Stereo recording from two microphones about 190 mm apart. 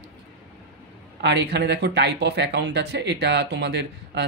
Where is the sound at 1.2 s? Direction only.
65° right (ahead or behind).